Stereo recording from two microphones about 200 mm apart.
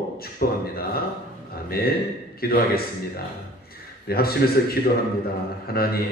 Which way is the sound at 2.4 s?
50° left (ahead or behind).